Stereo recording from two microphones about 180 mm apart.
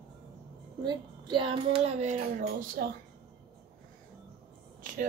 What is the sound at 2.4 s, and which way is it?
Speech, 55° right (ahead or behind).